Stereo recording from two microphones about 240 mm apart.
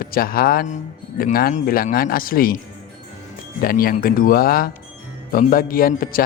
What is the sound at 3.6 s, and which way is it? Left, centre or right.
Speech, left.